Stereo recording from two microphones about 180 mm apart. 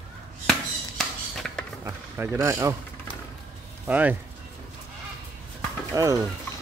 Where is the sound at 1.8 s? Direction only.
15° right (ahead or behind).